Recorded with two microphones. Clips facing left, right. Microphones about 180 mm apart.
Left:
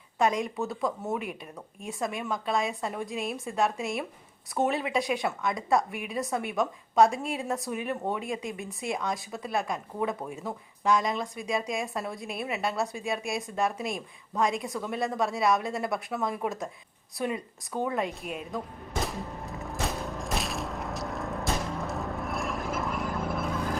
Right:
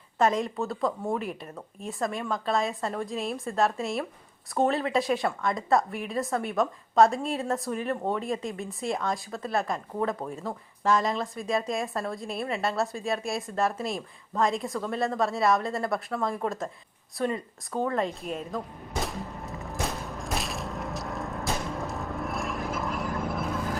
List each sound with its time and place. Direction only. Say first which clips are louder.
0.2 s speech: right 2 dB; centre (ahead or behind)
18.5 s music: right 1 dB; centre (ahead or behind)
20.1 s boom: left 1 dB; centre (ahead or behind)